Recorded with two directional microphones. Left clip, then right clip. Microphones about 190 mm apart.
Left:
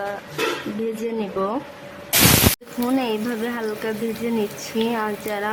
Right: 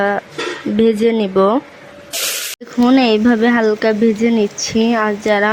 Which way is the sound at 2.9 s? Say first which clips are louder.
Right 11 dB; 35° right (ahead or behind).